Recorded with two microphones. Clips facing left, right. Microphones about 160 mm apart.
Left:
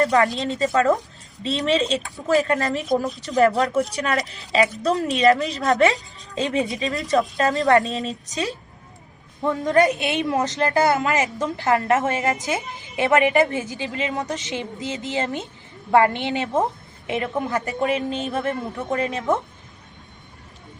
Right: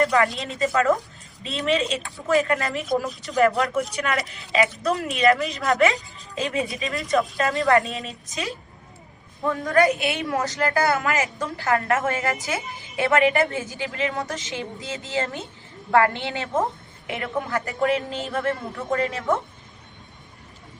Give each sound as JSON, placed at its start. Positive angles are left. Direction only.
{"t": 0.0, "sound": "a woman's voice", "side_deg": 35}
{"t": 9.4, "sound": "a woman's voice", "side_deg": 20}